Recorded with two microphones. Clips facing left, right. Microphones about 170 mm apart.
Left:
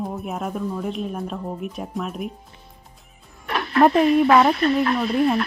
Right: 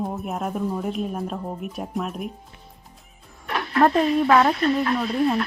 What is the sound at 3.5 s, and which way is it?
Music, 70° left (ahead or behind).